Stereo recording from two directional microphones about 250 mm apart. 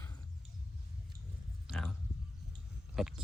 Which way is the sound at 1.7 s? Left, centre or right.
Centre.